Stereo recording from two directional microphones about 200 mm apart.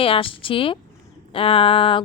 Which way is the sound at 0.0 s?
25° left (ahead or behind).